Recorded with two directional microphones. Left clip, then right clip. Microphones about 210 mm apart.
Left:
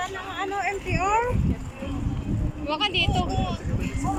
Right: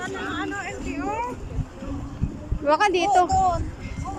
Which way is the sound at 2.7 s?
30° right (ahead or behind).